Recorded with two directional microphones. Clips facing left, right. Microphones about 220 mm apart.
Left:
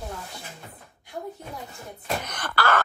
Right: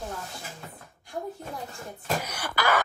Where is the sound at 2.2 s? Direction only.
10° right (ahead or behind).